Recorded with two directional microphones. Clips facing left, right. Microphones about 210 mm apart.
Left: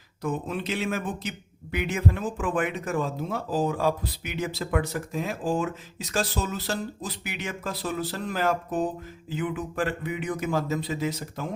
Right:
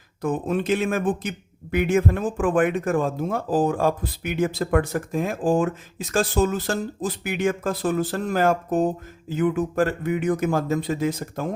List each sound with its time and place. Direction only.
0.2 s a man's voice: 50° right (ahead or behind)